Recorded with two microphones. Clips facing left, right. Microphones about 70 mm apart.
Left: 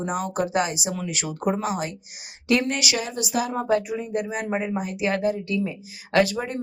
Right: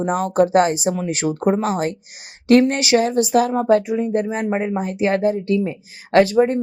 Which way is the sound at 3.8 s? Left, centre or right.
Right.